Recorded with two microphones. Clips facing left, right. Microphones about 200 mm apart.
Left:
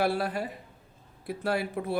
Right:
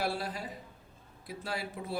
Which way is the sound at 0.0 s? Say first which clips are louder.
Left 7 dB; 60° left (ahead or behind).